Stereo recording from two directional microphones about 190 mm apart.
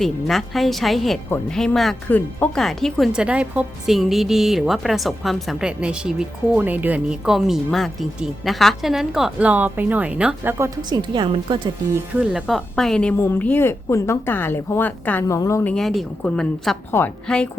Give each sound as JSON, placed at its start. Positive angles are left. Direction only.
{"t": 0.0, "sound": "speech", "side_deg": 0}
{"t": 10.8, "sound": "a woman's voice", "side_deg": -25}
{"t": 12.2, "sound": "a woman's voice", "side_deg": -5}
{"t": 15.7, "sound": "speech", "side_deg": 0}